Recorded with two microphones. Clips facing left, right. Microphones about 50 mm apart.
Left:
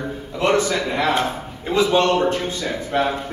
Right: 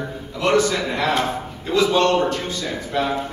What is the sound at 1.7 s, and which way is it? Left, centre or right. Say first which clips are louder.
A man's voice: even; left.